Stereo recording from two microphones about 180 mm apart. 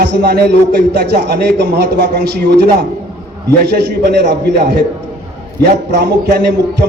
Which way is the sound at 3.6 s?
65° right (ahead or behind).